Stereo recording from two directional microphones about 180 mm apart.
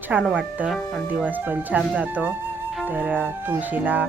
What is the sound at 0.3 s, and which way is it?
Speech, 5° right (ahead or behind).